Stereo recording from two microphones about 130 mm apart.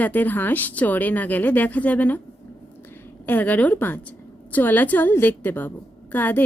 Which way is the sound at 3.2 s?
15° left (ahead or behind).